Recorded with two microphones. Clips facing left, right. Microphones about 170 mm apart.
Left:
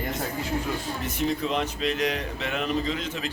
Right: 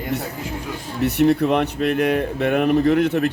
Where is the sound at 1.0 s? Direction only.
70° right (ahead or behind).